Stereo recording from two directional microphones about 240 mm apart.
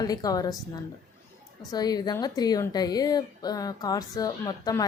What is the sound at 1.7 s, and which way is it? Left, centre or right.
A woman's voice, centre.